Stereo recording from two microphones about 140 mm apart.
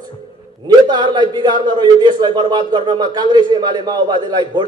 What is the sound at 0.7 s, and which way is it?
A man's voice, 30° right (ahead or behind).